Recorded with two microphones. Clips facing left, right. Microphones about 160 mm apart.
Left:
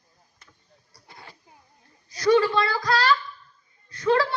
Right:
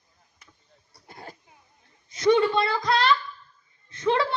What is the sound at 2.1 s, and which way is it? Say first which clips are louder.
A woman's voice: even; 20° right (ahead or behind).